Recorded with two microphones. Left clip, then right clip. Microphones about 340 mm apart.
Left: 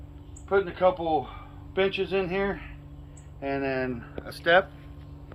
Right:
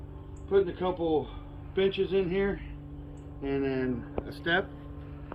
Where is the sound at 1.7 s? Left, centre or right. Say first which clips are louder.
Left 1 dB; centre.